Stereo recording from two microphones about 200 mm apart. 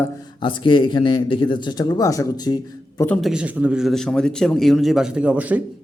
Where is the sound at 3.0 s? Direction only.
5° left (ahead or behind).